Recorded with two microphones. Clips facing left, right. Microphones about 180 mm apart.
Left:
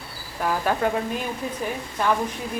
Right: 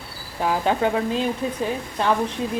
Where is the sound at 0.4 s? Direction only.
20° right (ahead or behind).